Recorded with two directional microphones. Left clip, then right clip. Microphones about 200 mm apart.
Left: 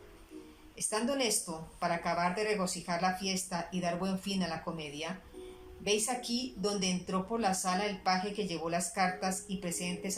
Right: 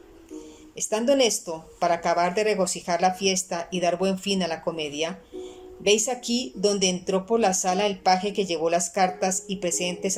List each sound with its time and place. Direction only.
0.8 s a woman's voice: 50° right (ahead or behind)